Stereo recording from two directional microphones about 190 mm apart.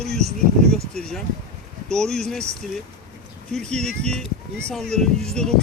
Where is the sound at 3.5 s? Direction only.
5° left (ahead or behind).